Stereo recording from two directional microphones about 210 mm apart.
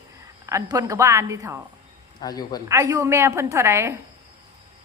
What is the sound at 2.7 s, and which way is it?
A woman's voice, 15° right (ahead or behind).